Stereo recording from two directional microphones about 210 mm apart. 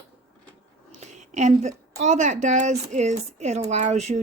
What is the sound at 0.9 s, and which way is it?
A woman's voice, 35° right (ahead or behind).